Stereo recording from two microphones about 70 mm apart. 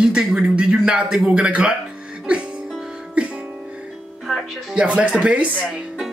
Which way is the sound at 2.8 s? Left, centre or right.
Centre.